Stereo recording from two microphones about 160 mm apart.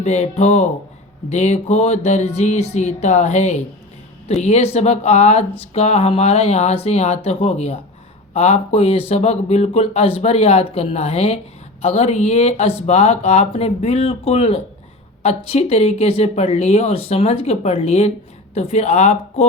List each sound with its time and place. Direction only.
0.0 s speech: 45° left (ahead or behind)